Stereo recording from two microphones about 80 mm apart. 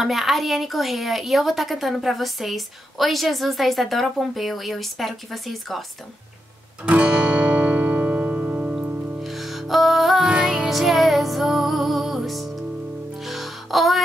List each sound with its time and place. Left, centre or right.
0.0 s a woman's voice: centre
6.8 s music: centre
9.2 s music: centre